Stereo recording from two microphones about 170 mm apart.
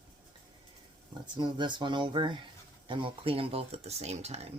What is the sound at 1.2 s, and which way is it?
Speech, 25° right (ahead or behind).